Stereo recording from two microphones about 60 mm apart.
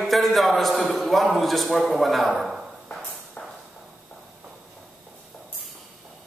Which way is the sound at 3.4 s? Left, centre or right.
Left.